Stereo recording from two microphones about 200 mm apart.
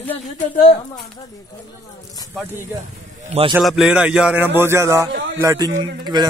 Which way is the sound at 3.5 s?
Centre (ahead or behind).